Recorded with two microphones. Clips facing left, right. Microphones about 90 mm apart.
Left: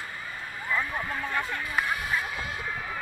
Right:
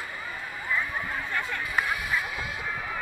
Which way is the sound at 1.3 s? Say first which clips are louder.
Right 1 dB; 30° left (ahead or behind).